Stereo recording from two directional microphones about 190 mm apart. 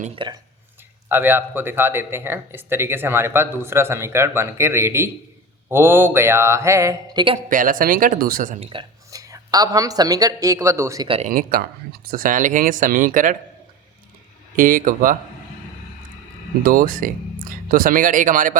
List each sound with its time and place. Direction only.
0.2 s speech: 25° right (ahead or behind)
1.0 s speech: 10° right (ahead or behind)
7.5 s speech: 45° right (ahead or behind); by 11.1 s 15° right (ahead or behind)
11.3 s speech: 50° right (ahead or behind)
14.5 s speech: 45° right (ahead or behind)
16.6 s speech: 50° right (ahead or behind)